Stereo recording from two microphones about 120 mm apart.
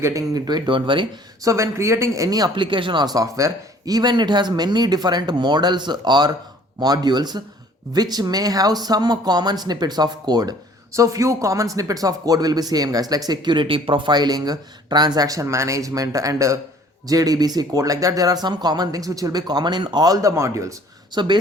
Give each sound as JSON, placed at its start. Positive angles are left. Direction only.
{"t": 0.0, "sound": "speech", "side_deg": -30}
{"t": 1.4, "sound": "speech", "side_deg": -25}
{"t": 21.1, "sound": "speech", "side_deg": -35}